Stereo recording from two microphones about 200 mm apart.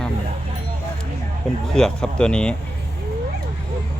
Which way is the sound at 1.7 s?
5° left (ahead or behind).